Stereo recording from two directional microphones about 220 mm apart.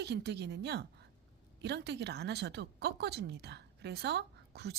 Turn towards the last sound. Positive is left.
turn(degrees=-50)  # may be behind; listen again after turning